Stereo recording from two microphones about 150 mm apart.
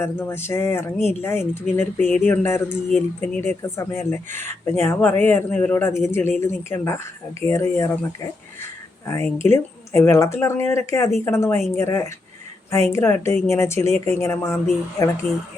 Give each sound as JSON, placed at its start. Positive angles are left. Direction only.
{"t": 0.0, "sound": "speech", "side_deg": 15}
{"t": 2.0, "sound": "speech", "side_deg": 0}
{"t": 2.2, "sound": "speech", "side_deg": 15}